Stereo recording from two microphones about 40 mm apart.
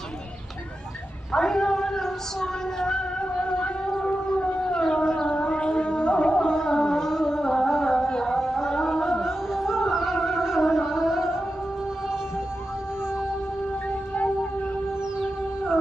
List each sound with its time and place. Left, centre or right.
1.3 s a sound: centre
4.0 s siren: left
5.3 s music: left; by 9.2 s centre
9.2 s music: centre
10.4 s carnatic music: centre